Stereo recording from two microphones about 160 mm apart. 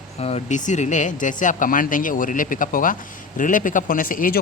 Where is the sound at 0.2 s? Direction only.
40° left (ahead or behind).